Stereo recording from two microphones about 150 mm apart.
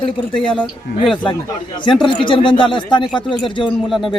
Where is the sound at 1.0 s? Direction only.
Centre (ahead or behind).